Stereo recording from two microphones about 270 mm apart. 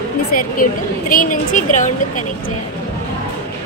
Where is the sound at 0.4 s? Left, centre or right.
Left.